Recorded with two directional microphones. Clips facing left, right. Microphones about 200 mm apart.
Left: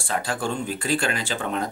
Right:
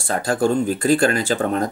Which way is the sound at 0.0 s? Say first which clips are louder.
Right 7 dB; 45° right (ahead or behind).